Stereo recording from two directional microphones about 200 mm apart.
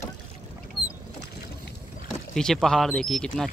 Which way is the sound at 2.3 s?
Centre (ahead or behind).